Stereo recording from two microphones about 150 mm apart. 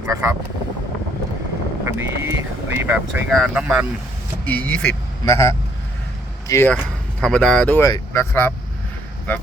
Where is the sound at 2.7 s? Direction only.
10° right (ahead or behind).